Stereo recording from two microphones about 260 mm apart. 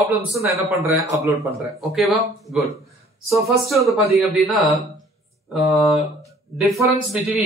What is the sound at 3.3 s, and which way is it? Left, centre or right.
Speech, centre.